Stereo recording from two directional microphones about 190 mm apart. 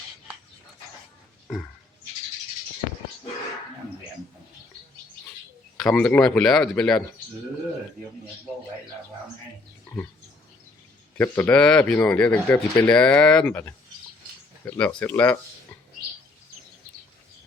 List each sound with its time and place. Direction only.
5.8 s speech: 5° left (ahead or behind)
11.2 s speech: 10° left (ahead or behind)